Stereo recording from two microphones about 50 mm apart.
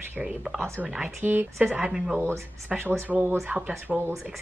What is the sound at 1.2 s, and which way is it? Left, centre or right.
Speech, right.